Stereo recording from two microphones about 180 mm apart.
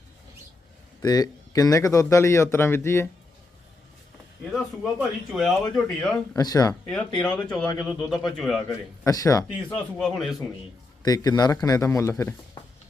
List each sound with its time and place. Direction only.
1.0 s speech: 20° left (ahead or behind)
4.5 s speech: centre (ahead or behind)
6.3 s speech: 20° left (ahead or behind)
7.2 s speech: 5° left (ahead or behind)
9.0 s speech: 20° left (ahead or behind); by 10.3 s centre (ahead or behind)
11.0 s speech: 20° left (ahead or behind)